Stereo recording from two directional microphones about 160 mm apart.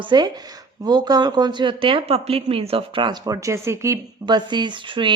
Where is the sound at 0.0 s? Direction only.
25° right (ahead or behind).